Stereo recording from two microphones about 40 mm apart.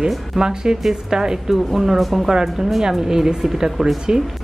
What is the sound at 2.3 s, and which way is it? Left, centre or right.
Speech, centre.